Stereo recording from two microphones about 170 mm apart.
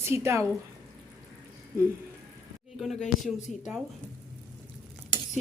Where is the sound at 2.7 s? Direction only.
Centre (ahead or behind).